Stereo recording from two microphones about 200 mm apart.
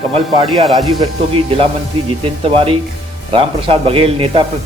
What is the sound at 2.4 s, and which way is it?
Speech, 25° right (ahead or behind).